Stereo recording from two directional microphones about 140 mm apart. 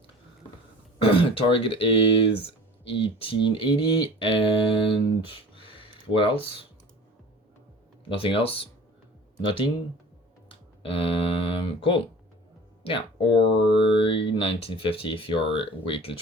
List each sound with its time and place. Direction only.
0.9 s speech: 40° left (ahead or behind)
8.1 s speech: 40° left (ahead or behind)
10.5 s speech: 40° left (ahead or behind)